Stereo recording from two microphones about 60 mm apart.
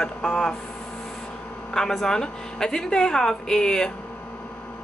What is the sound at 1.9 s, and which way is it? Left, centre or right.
Speech, centre.